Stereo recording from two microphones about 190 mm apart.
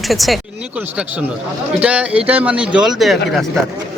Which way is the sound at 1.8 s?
5° right (ahead or behind).